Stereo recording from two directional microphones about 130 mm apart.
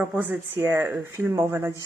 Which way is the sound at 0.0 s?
10° right (ahead or behind).